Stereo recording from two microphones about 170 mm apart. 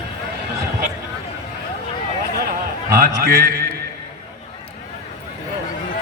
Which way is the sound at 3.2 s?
65° right (ahead or behind).